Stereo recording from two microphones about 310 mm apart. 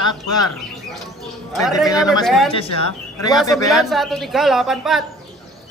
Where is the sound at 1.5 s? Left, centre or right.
Centre.